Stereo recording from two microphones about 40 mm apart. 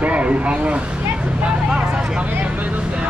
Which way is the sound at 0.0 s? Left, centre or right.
Right.